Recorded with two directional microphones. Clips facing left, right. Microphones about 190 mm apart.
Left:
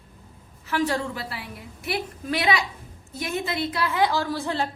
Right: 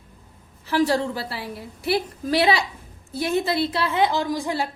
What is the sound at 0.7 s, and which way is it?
A woman's voice, 35° right (ahead or behind).